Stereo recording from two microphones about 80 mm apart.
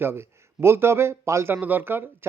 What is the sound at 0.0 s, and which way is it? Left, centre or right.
A man's voice, right.